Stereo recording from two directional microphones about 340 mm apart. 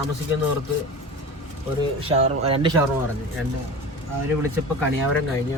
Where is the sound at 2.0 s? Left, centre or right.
Centre.